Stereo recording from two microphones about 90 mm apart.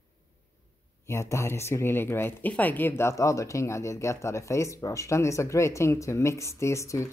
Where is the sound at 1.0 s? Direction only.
30° left (ahead or behind).